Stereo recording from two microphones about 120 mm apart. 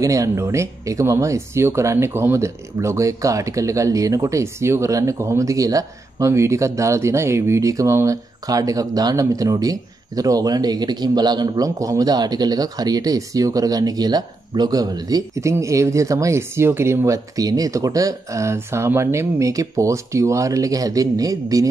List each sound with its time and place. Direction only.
0.0 s speech: 25° right (ahead or behind)